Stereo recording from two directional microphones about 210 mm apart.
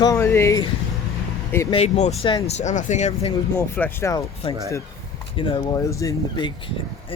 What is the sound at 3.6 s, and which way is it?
Speech, 10° left (ahead or behind).